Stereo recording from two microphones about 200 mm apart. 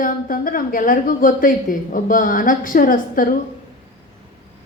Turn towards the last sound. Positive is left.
turn(degrees=45)  # may be behind; listen again after turning